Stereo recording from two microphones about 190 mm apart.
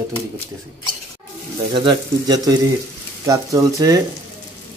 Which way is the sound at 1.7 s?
25° right (ahead or behind).